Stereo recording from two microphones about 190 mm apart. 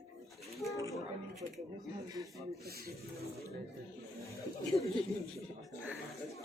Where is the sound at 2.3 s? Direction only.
Centre (ahead or behind).